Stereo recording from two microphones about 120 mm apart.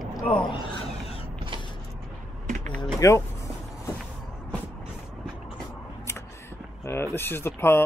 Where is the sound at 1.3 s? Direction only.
45° right (ahead or behind).